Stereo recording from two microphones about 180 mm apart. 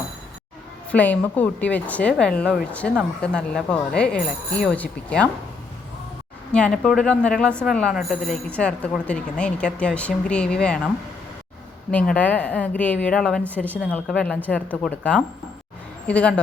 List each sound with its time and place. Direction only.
0.9 s a woman's voice: 10° left (ahead or behind)
6.5 s a woman's voice: 5° left (ahead or behind)